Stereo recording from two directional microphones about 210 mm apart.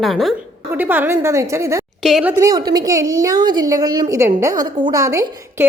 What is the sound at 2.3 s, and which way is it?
A woman's voice, 15° right (ahead or behind).